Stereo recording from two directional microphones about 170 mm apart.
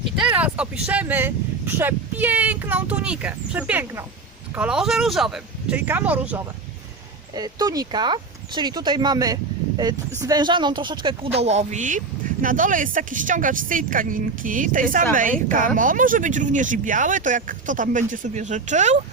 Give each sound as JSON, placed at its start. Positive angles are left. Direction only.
{"t": 0.2, "sound": "speech", "side_deg": -5}
{"t": 7.3, "sound": "speech", "side_deg": -20}